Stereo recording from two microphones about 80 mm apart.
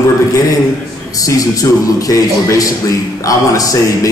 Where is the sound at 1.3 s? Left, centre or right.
Left.